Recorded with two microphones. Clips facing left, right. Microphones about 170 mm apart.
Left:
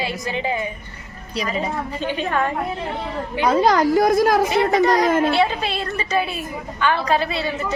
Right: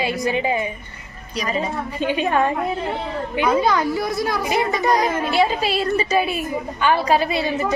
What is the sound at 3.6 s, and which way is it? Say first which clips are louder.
Speech: left 4 dB; 35° left (ahead or behind).